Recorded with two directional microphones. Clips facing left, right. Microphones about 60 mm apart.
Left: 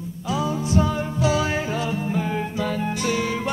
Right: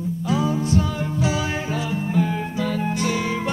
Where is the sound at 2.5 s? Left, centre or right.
Centre.